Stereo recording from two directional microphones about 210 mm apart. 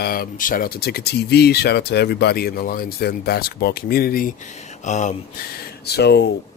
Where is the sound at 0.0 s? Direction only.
45° left (ahead or behind).